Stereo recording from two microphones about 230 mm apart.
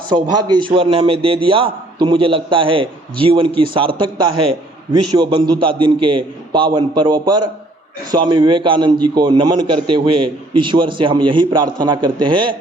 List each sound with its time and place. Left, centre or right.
0.1 s a man's voice: centre
9.8 s a man's voice: right
10.6 s a man's voice: right